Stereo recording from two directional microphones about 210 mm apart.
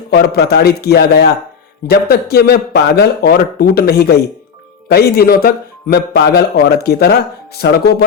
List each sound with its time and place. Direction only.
0.1 s a man's voice: 50° left (ahead or behind)